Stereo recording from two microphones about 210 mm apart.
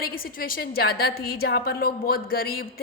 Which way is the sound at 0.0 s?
45° left (ahead or behind).